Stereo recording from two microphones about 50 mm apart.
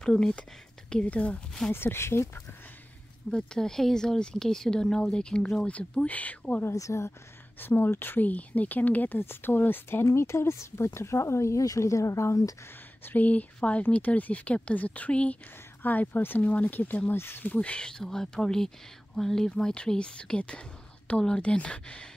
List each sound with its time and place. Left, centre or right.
0.2 s speech: centre
1.7 s speech: left
3.3 s speech: centre; by 6.6 s left
6.7 s speech: left
7.6 s speech: left
8.3 s speech: left
9.2 s speech: left
10.0 s speech: left
13.0 s speech: left
16.2 s speech: left
16.4 s speech: left
17.6 s speech: centre